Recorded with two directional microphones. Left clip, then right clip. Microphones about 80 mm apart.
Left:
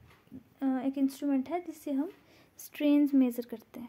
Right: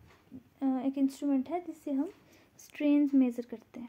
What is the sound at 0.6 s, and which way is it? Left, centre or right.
Speech, left.